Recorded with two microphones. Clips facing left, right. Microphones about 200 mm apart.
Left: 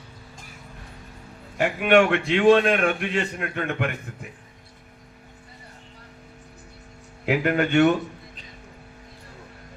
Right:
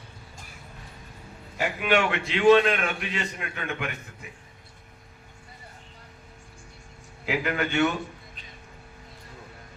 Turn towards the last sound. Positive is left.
turn(degrees=50)  # may be behind; listen again after turning